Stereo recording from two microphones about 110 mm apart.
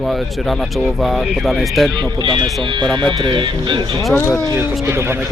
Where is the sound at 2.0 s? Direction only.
45° right (ahead or behind).